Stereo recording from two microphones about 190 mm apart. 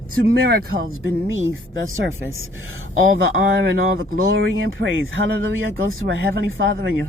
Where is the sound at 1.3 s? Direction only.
90° right.